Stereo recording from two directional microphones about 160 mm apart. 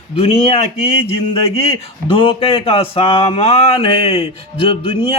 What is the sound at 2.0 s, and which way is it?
A man's voice, 35° left (ahead or behind).